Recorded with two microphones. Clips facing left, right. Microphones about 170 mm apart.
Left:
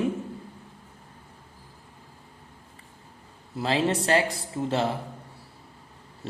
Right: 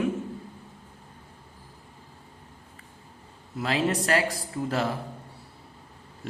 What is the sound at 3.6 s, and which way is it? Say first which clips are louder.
Speech: left 1 dB; 30° left (ahead or behind).